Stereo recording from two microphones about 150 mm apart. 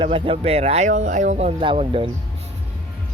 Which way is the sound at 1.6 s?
35° right (ahead or behind).